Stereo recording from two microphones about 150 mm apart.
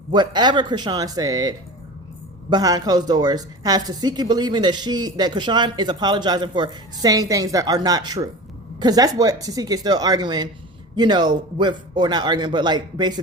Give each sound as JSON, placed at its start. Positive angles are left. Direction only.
{"t": 0.1, "sound": "a woman's voice", "side_deg": -30}